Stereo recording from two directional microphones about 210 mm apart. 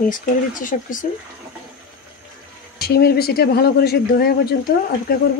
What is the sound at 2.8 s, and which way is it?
Speech, 50° left (ahead or behind).